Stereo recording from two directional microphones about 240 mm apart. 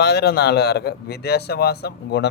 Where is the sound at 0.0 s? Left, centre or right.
Left.